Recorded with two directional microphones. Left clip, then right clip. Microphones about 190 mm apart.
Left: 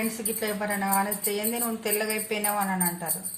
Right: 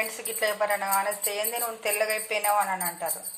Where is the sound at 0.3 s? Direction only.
30° right (ahead or behind).